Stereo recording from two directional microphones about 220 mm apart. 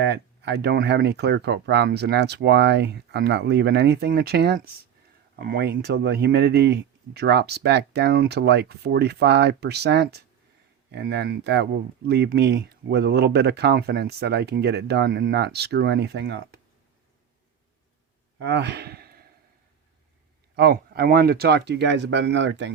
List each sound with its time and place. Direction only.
0.0 s speech: 50° right (ahead or behind)
18.3 s speech: 50° right (ahead or behind)
20.6 s speech: 45° right (ahead or behind)